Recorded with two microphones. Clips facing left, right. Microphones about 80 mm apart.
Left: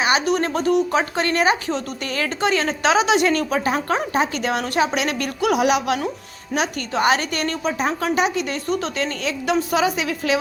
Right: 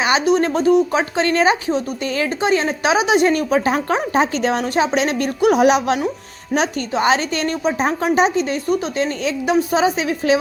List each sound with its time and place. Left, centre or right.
0.0 s speech: right